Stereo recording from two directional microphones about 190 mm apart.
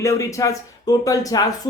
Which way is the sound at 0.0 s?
15° left (ahead or behind).